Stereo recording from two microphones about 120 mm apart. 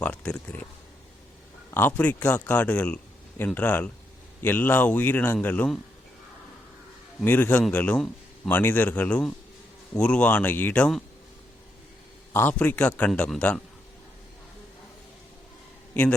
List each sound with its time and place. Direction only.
0.0 s a sound: 10° left (ahead or behind)
1.7 s speech: 15° left (ahead or behind)
7.3 s speech: 15° left (ahead or behind)
12.3 s speech: 15° left (ahead or behind)